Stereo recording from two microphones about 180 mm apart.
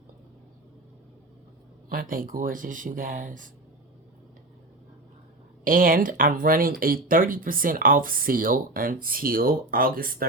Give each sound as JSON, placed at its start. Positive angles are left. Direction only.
{"t": 1.9, "sound": "speech", "side_deg": -55}
{"t": 5.6, "sound": "speech", "side_deg": -50}